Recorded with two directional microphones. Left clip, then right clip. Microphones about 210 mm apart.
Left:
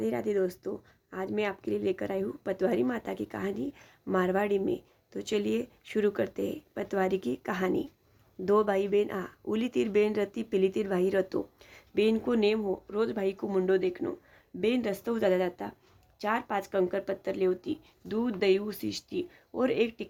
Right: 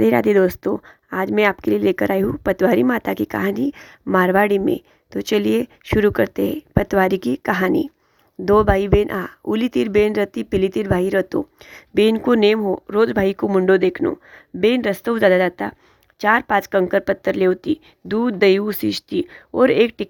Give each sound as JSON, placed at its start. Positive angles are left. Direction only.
{"t": 0.0, "sound": "speech", "side_deg": -45}